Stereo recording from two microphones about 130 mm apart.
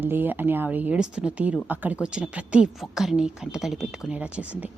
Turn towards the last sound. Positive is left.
turn(degrees=-10)  # may be behind; listen again after turning